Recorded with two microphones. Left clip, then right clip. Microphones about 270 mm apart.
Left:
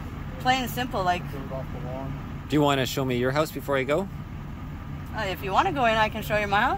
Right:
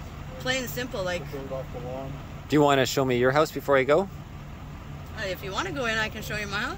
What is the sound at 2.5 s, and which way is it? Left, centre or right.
Speech, centre.